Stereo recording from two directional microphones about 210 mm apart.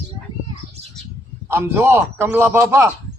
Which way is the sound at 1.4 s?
10° right (ahead or behind).